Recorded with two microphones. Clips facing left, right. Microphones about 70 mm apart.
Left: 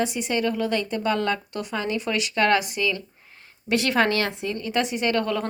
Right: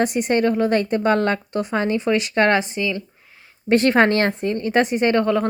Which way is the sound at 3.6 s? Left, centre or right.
Right.